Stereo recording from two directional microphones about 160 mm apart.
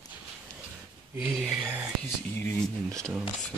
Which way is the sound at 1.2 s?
5° right (ahead or behind).